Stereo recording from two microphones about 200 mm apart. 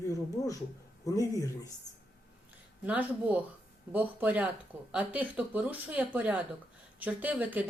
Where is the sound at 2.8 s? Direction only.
10° right (ahead or behind).